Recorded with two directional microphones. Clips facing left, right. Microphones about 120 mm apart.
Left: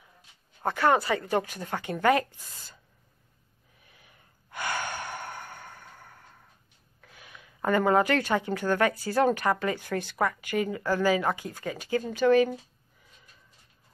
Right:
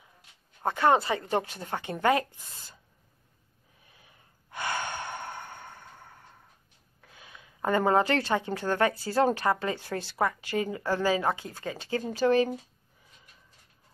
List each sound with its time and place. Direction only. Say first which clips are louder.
0.7 s speech: even; 25° right (ahead or behind)
3.8 s gasp: left 1 dB; 25° right (ahead or behind)
7.0 s speech: left 1 dB; 25° right (ahead or behind)